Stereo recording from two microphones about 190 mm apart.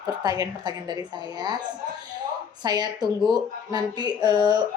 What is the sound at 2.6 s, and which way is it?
A woman's voice, 20° right (ahead or behind).